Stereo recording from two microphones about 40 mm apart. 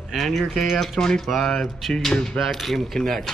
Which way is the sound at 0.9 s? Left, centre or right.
Centre.